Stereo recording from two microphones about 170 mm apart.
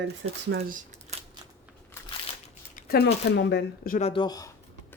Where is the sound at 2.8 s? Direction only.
65° left (ahead or behind).